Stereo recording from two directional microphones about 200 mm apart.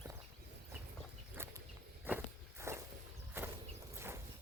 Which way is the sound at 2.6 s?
15° right (ahead or behind).